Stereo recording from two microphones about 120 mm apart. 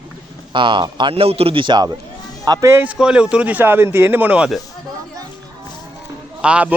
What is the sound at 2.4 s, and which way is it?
Speech, 30° right (ahead or behind).